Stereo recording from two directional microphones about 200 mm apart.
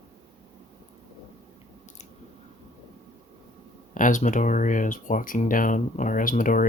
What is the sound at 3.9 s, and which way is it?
Speech, 40° left (ahead or behind).